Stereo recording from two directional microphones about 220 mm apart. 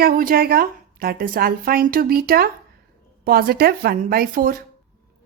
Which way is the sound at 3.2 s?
45° right (ahead or behind).